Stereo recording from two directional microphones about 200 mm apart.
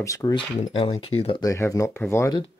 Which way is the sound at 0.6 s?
30° left (ahead or behind).